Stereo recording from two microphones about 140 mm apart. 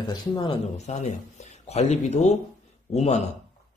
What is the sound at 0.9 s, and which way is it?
Speech, 55° left (ahead or behind).